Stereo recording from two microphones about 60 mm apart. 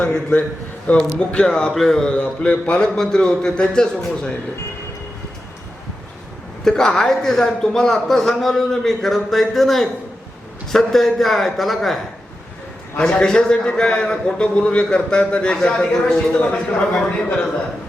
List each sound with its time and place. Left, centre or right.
0.1 s speech: centre
0.9 s speech: left
1.3 s speech: centre
6.7 s speech: centre
13.0 s speech: centre
16.4 s speech: left